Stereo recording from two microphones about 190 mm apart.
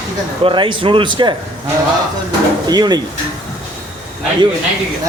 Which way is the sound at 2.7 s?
20° right (ahead or behind).